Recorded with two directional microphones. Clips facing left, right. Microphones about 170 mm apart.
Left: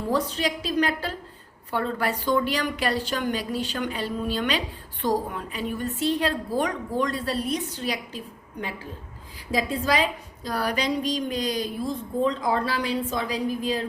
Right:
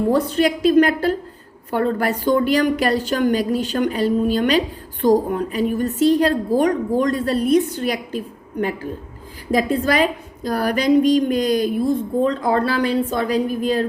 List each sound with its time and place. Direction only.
0.1 s a woman's voice: 55° right (ahead or behind)
9.5 s a woman's voice: 55° right (ahead or behind)